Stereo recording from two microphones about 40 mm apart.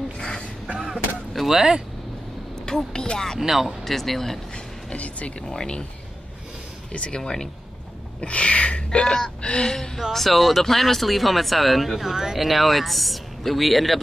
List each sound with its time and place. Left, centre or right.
0.7 s music: centre
1.3 s vehicle: centre
2.6 s speech: centre
3.3 s speech: centre
3.8 s speech: centre
4.9 s speech: left
5.5 s speech: centre
6.9 s speech: left
7.2 s speech: centre
8.2 s speech: left
9.9 s speech: centre
12.4 s speech: centre